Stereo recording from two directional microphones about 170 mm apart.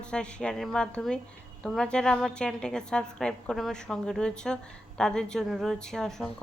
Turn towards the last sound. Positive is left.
turn(degrees=5)  # may be behind; listen again after turning